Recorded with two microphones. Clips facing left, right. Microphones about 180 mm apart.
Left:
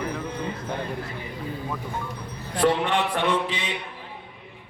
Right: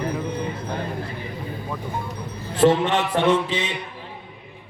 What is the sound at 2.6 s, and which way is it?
A man's voice, 25° right (ahead or behind).